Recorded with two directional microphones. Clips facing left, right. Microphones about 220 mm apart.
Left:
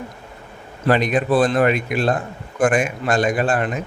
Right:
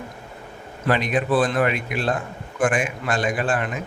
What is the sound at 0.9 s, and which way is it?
Speech, 40° left (ahead or behind).